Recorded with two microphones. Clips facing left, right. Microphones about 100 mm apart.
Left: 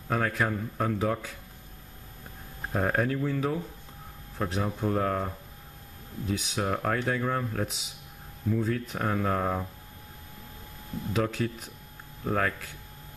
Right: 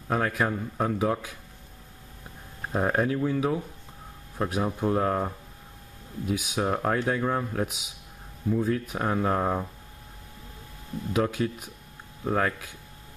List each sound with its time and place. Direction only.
0.1 s speech: 10° right (ahead or behind)
2.9 s speech: 10° right (ahead or behind)
6.2 s speech: 10° right (ahead or behind)
11.1 s speech: 10° right (ahead or behind)